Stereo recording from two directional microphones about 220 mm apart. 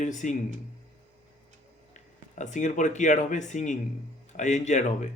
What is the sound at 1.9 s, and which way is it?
Speech, 35° left (ahead or behind).